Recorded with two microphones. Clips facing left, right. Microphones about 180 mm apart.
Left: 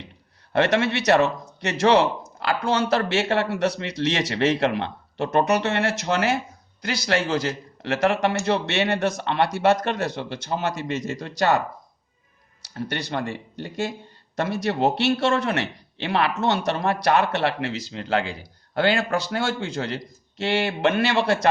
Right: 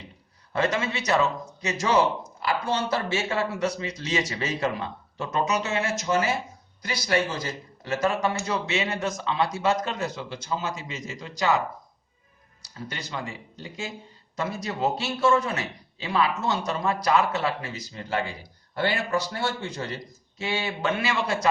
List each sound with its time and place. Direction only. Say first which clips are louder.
0.5 s a man's voice: left 5 dB; 70° left (ahead or behind)
12.6 s a man's voice: left 8 dB; 70° left (ahead or behind)